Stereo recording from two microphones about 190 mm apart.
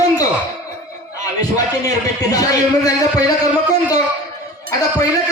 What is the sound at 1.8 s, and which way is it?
Speech, 20° left (ahead or behind).